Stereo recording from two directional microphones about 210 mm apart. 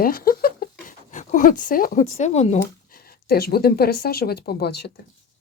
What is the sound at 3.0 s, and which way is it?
Speech, 45° left (ahead or behind).